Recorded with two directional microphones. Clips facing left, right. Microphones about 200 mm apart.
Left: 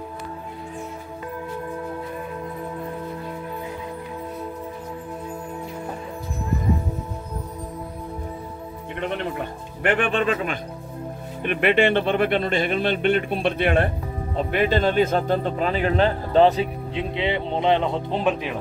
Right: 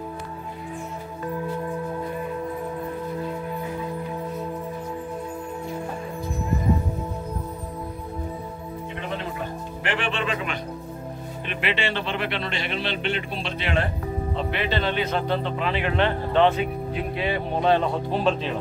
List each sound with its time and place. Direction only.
9.8 s speech: 55° left (ahead or behind); by 16.6 s 35° left (ahead or behind)
16.9 s speech: 20° left (ahead or behind)